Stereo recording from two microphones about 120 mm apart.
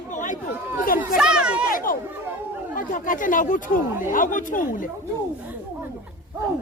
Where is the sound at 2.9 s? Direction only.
90° left.